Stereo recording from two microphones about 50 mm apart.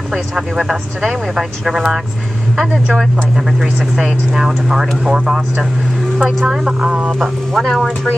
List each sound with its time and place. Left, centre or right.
0.1 s speech: centre
3.9 s speech: centre
6.8 s speech: right
7.1 s speech: centre
7.6 s speech: centre